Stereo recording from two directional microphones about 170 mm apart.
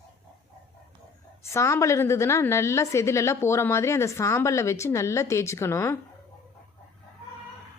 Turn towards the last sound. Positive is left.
turn(degrees=15)  # may be behind; listen again after turning